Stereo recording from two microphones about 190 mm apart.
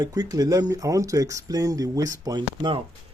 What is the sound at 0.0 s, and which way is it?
Speech, 20° right (ahead or behind).